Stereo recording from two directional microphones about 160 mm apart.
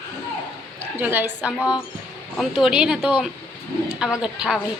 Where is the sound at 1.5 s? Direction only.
20° left (ahead or behind).